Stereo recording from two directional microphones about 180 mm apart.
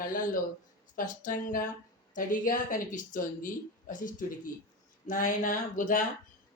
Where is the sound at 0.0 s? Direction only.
50° left (ahead or behind).